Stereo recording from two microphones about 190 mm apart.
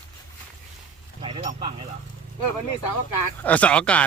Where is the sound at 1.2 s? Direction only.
25° right (ahead or behind).